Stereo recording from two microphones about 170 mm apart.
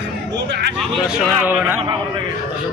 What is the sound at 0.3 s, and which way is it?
Speech, 90° right.